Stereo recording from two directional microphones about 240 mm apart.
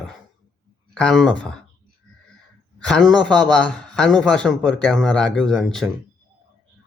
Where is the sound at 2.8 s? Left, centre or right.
Centre.